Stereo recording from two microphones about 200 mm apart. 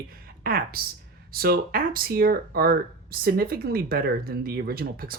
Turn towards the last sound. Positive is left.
turn(degrees=-50)  # may be behind; listen again after turning